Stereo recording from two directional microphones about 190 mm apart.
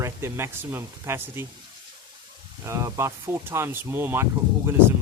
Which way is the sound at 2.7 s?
15° right (ahead or behind).